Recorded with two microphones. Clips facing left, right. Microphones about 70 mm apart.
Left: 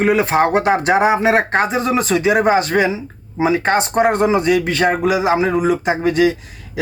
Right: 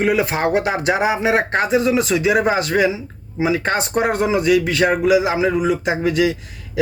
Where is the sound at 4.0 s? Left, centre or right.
Left.